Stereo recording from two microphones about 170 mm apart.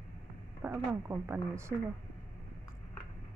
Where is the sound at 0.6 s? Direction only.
10° right (ahead or behind).